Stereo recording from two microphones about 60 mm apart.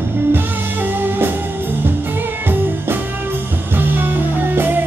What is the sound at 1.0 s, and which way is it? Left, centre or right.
Music, right.